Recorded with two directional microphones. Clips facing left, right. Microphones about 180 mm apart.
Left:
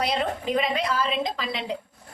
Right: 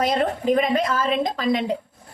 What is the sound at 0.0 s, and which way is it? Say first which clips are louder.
A woman's voice: right 5 dB; 45° right (ahead or behind).